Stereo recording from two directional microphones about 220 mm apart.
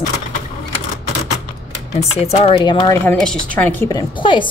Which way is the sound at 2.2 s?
30° left (ahead or behind).